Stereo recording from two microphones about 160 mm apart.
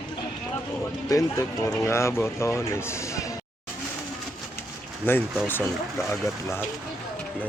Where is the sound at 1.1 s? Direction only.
20° left (ahead or behind).